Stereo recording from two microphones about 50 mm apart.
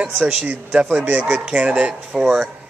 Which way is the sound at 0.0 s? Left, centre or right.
Centre.